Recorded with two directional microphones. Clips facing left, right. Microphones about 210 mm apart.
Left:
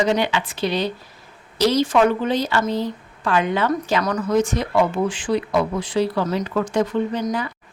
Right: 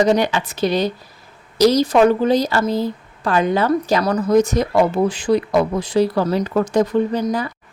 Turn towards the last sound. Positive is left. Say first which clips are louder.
# right 3 dB
turn(degrees=-40)  # may be behind; listen again after turning